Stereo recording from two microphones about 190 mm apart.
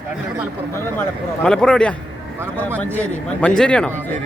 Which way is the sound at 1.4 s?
5° left (ahead or behind).